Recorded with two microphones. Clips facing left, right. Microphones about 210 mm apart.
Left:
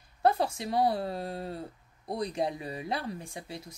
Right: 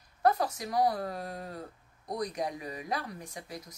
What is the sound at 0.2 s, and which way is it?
Speech, 30° left (ahead or behind).